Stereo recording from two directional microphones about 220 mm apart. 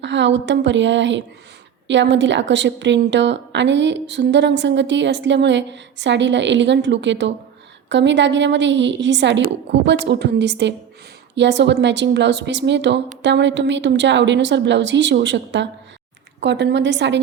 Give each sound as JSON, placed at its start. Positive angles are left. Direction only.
{"t": 0.0, "sound": "a woman's voice", "side_deg": -55}